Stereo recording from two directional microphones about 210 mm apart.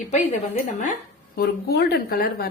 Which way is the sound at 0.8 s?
40° left (ahead or behind).